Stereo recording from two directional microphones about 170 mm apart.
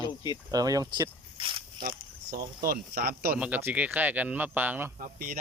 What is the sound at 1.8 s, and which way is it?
Speech, 65° right (ahead or behind).